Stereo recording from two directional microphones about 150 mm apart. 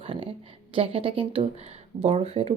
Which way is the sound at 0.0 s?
35° right (ahead or behind).